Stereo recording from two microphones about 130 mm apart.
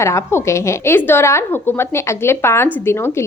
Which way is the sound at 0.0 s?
20° left (ahead or behind).